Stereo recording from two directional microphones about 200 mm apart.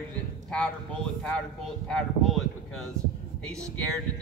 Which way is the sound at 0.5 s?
5° left (ahead or behind).